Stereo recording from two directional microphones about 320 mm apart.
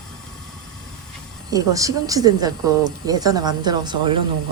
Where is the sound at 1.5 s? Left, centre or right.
Centre.